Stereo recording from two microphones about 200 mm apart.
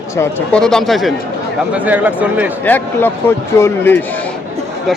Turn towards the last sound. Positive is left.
turn(degrees=10)  # may be behind; listen again after turning